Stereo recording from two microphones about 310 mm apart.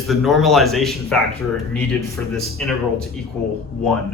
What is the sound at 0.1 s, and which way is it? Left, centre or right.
A man's voice, centre.